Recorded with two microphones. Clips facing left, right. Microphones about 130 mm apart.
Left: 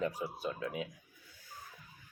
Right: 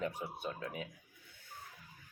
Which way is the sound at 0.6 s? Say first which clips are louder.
Left 4 dB; 30° left (ahead or behind).